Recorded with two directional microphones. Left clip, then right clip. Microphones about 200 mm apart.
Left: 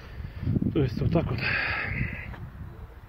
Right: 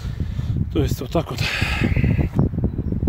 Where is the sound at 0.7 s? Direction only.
30° right (ahead or behind).